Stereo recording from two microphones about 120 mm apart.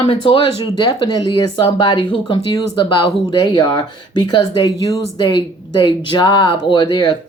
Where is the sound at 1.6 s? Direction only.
40° left (ahead or behind).